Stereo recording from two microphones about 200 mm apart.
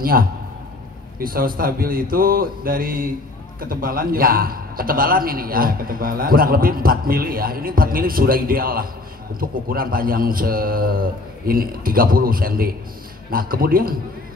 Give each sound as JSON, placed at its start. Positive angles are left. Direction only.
{"t": 0.0, "sound": "a man's voice", "side_deg": -45}